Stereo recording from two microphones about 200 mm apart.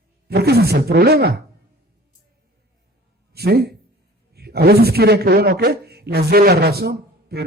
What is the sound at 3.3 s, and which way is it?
A man's voice, 50° right (ahead or behind).